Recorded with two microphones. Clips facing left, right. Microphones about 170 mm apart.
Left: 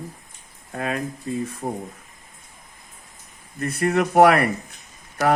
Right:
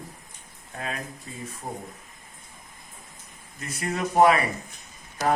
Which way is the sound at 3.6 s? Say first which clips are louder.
Left 9 dB; 60° left (ahead or behind).